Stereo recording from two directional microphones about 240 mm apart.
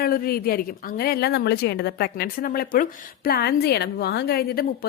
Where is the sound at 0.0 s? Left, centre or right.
Left.